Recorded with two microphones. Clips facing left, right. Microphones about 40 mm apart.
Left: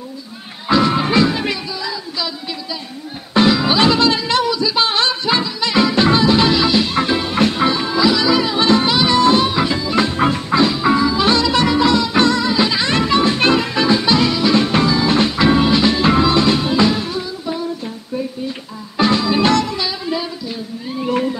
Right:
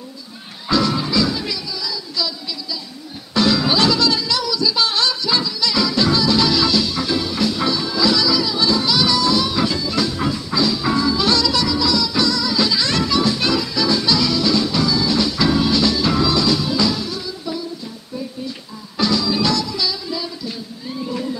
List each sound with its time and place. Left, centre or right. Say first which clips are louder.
0.7 s music: left 4 dB; left
1.0 s music: left 5 dB; left
3.3 s music: left 3 dB; left
8.3 s music: left 4 dB; left
11.6 s music: left 5 dB; left
18.9 s music: left 4 dB; left
19.8 s music: left 2 dB; left
21.0 s whale vocalization: left 7 dB; left